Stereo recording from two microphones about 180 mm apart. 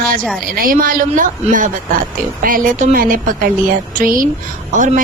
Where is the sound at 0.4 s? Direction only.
50° right (ahead or behind).